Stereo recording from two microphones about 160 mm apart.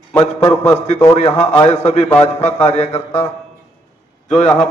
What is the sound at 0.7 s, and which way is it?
A man's voice, 45° left (ahead or behind).